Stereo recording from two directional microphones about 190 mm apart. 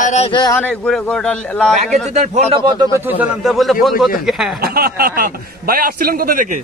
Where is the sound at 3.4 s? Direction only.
Centre (ahead or behind).